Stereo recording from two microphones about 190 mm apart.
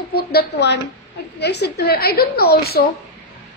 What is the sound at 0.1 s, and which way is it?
A woman's voice, 55° left (ahead or behind).